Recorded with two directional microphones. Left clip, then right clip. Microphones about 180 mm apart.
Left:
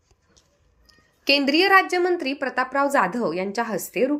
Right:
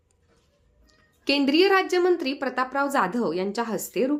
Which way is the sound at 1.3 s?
5° left (ahead or behind).